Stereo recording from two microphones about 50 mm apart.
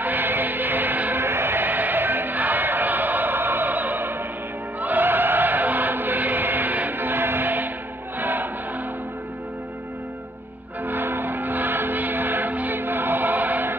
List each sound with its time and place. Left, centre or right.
0.0 s music: right
1.2 s music: right
10.9 s music: right